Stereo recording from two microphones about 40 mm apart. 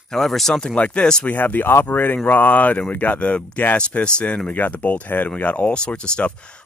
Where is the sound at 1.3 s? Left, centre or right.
Left.